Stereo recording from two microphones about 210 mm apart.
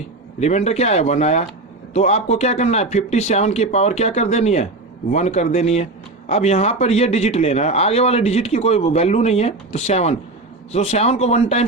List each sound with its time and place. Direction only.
0.3 s a man's voice: 30° left (ahead or behind)